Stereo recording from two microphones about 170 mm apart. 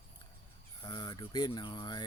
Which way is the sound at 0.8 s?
25° left (ahead or behind).